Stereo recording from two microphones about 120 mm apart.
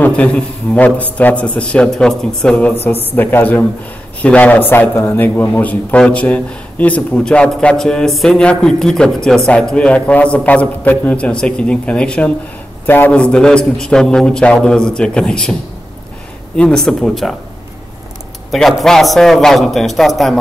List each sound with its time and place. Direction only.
0.0 s a man's voice: 10° left (ahead or behind)
16.5 s a man's voice: 5° left (ahead or behind)
18.5 s a man's voice: centre (ahead or behind)